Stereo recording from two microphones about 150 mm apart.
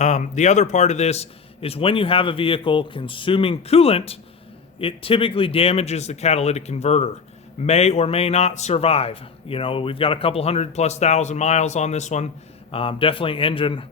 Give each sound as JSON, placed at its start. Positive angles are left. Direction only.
{"t": 0.0, "sound": "a man's voice", "side_deg": 50}
{"t": 12.7, "sound": "a man's voice", "side_deg": 35}